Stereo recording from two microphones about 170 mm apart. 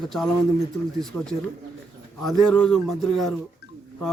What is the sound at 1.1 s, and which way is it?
Speech, 15° left (ahead or behind).